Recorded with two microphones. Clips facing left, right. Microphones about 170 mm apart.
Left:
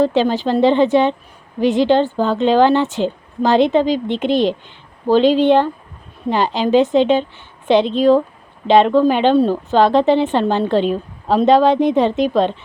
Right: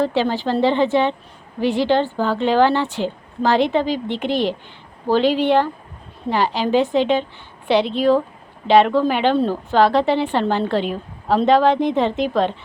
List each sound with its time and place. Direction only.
0.0 s a woman's voice: 15° left (ahead or behind)